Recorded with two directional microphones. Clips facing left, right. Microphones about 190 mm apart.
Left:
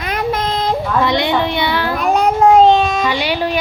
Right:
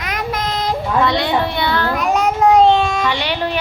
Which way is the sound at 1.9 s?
30° left (ahead or behind).